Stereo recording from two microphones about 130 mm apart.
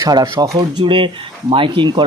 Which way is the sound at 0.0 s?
30° right (ahead or behind).